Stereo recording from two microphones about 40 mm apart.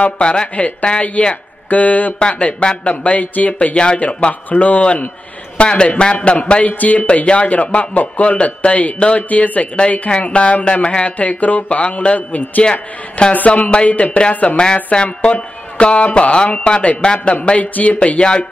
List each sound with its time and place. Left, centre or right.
0.2 s speech: left
2.1 s speech: left
3.7 s speech: left
4.3 s speech: left
5.6 s speech: left
6.1 s speech: left
11.1 s speech: left
13.5 s speech: left
14.6 s speech: left